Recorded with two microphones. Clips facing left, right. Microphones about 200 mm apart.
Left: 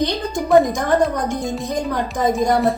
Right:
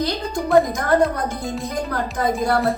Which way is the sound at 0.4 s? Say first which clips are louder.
Left 2 dB; 5° right (ahead or behind).